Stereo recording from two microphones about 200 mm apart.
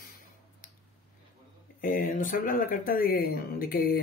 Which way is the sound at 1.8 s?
45° left (ahead or behind).